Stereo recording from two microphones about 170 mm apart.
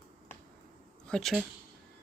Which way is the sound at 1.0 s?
5° left (ahead or behind).